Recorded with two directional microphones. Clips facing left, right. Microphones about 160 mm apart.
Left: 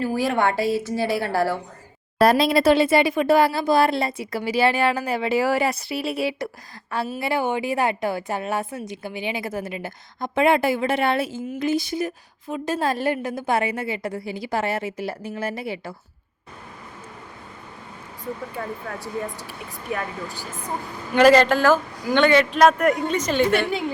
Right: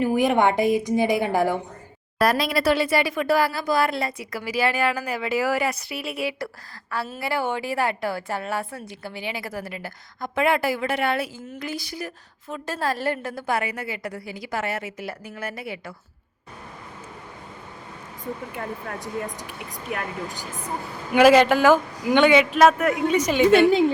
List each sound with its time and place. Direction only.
0.0 s a man's voice: 20° right (ahead or behind)
2.1 s a woman's voice: 25° left (ahead or behind)
19.0 s a man's voice: 15° right (ahead or behind)
21.1 s a man's voice: 10° right (ahead or behind)